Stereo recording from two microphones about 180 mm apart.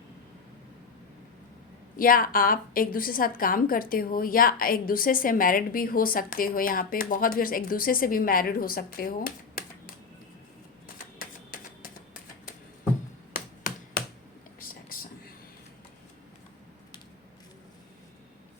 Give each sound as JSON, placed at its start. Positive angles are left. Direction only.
{"t": 2.0, "sound": "a woman's voice", "side_deg": 50}
{"t": 10.9, "sound": "typewriter", "side_deg": 50}
{"t": 13.3, "sound": "finger snapping", "side_deg": 50}